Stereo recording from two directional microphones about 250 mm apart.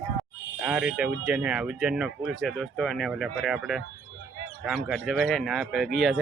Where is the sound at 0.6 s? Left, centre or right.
Centre.